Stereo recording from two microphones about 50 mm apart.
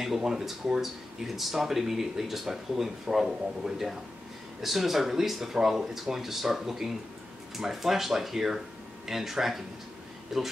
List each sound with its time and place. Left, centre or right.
0.0 s speech: centre